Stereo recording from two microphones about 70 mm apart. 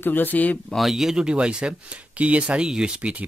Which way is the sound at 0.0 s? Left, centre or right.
Left.